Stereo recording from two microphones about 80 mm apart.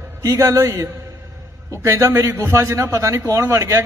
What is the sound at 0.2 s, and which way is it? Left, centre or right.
A man's voice, right.